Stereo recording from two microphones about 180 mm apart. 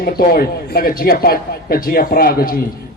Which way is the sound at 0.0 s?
55° left (ahead or behind).